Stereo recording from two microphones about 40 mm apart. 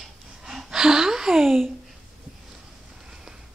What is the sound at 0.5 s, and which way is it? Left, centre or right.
Speech, centre.